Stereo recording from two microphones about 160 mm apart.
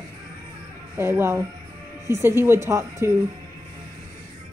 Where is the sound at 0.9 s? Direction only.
15° right (ahead or behind).